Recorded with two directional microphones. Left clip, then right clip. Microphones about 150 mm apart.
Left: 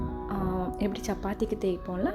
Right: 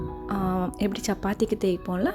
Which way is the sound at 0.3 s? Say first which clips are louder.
Right 4 dB; 25° right (ahead or behind).